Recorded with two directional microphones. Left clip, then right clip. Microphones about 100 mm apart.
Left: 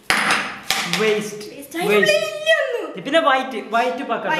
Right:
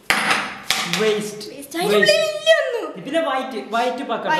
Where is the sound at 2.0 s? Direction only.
15° right (ahead or behind).